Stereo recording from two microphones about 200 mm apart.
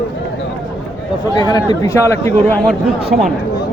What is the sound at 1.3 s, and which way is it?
A man's voice, 20° left (ahead or behind).